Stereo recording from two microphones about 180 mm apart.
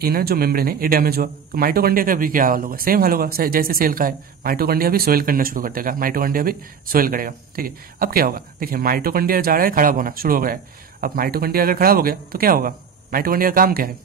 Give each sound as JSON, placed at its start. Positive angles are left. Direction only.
{"t": 0.0, "sound": "speech", "side_deg": -60}